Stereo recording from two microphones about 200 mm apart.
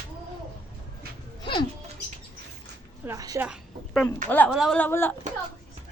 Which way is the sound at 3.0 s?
15° right (ahead or behind).